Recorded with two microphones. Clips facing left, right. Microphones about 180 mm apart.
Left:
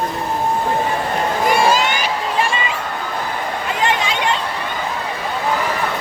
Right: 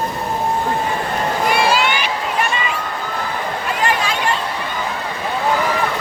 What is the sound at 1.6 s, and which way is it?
Crowd, 45° left (ahead or behind).